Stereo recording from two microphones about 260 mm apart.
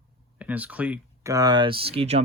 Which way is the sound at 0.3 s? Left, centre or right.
Centre.